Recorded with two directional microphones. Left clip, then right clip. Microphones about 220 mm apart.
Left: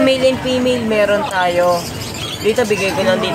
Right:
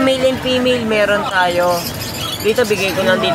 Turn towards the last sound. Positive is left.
turn(degrees=15)  # may be behind; listen again after turning